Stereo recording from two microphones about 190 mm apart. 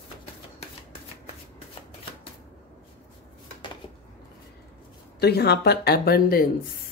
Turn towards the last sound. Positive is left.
turn(degrees=50)  # may be behind; listen again after turning